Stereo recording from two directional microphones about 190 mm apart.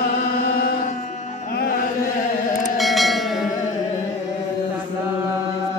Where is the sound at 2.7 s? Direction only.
Centre (ahead or behind).